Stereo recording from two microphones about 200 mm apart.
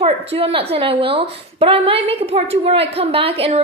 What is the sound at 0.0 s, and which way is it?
A woman's voice, 30° right (ahead or behind).